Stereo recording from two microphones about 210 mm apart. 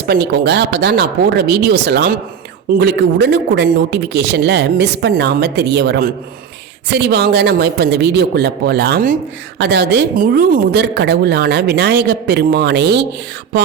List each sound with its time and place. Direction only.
0.1 s a woman's voice: 50° right (ahead or behind)